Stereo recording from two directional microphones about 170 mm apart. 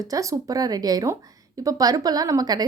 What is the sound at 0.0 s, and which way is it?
Speech, 20° right (ahead or behind).